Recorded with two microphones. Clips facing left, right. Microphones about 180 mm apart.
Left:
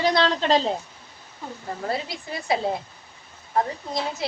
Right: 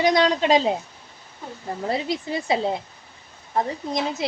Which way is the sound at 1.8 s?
20° right (ahead or behind).